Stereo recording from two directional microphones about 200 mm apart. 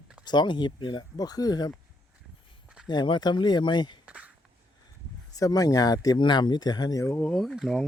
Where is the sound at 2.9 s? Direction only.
20° left (ahead or behind).